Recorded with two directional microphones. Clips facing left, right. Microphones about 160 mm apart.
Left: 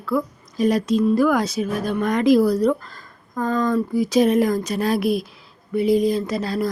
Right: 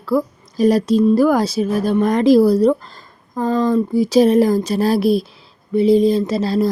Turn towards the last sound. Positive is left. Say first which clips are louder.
# right 6 dB
turn(degrees=-25)  # may be behind; listen again after turning